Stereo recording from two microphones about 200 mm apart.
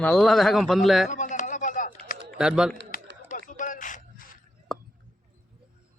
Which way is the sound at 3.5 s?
40° left (ahead or behind).